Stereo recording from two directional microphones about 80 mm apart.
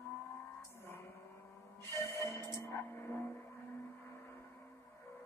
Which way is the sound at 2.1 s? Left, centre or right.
Left.